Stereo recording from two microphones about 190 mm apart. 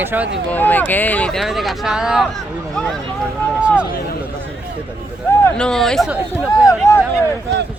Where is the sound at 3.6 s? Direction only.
5° right (ahead or behind).